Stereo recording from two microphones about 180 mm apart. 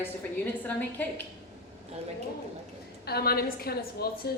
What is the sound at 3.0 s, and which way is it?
A woman's voice, 60° left (ahead or behind).